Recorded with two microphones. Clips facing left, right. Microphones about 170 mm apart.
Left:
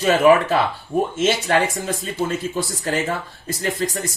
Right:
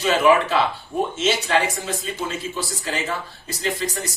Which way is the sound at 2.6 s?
50° left (ahead or behind).